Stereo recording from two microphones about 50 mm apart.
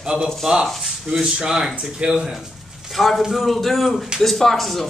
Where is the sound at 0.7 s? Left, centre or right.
Centre.